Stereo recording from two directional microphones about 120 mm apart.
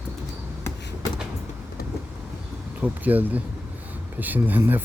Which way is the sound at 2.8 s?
15° right (ahead or behind).